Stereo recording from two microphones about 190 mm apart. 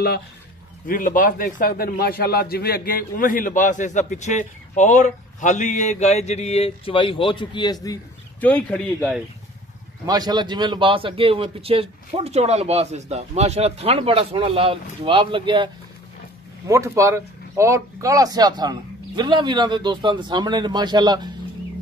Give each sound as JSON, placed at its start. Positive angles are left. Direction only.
{"t": 0.8, "sound": "a man's voice", "side_deg": 45}
{"t": 8.4, "sound": "speech", "side_deg": 10}
{"t": 10.0, "sound": "a man's voice", "side_deg": -20}